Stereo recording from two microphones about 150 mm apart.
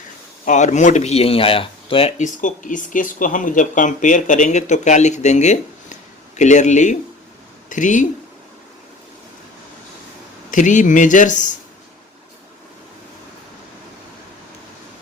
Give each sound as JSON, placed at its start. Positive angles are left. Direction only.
{"t": 0.4, "sound": "speech", "side_deg": 55}
{"t": 2.2, "sound": "speech", "side_deg": 60}
{"t": 10.5, "sound": "speech", "side_deg": 55}